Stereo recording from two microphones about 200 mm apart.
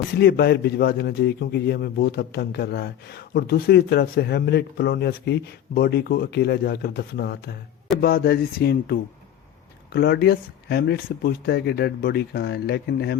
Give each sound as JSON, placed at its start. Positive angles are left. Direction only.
{"t": 0.2, "sound": "a man's voice", "side_deg": 50}